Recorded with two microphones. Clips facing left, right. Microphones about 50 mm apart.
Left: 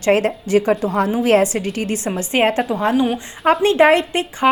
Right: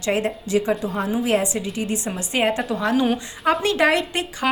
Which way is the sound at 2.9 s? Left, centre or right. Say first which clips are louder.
Even; centre.